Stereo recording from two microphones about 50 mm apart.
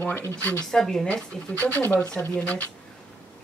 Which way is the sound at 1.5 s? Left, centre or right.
Left.